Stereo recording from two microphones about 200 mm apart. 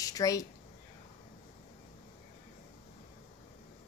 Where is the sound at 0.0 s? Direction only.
15° left (ahead or behind).